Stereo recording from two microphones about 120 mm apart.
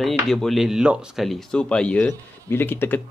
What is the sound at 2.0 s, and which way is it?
Speech, 20° left (ahead or behind).